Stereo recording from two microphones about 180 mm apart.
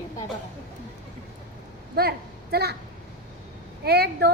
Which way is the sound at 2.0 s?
60° right (ahead or behind).